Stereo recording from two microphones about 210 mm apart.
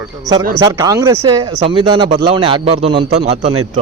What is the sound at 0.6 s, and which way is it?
A man's voice, 15° right (ahead or behind).